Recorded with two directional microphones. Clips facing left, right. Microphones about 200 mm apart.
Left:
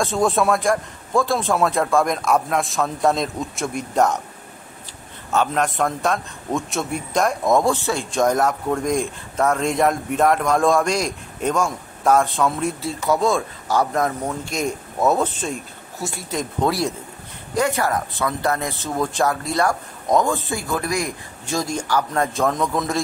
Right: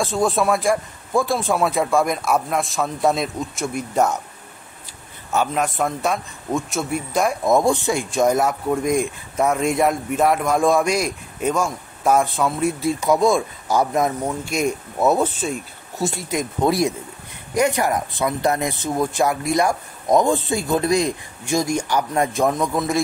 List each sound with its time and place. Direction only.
0.0 s a man's voice: centre (ahead or behind)
5.3 s a man's voice: 5° right (ahead or behind)
7.6 s speech: 15° right (ahead or behind)
16.3 s speech: 15° right (ahead or behind)